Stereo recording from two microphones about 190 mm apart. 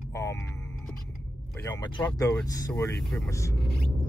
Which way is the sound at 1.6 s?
15° left (ahead or behind).